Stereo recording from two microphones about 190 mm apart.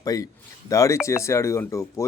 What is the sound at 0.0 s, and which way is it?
A man's voice, 20° left (ahead or behind).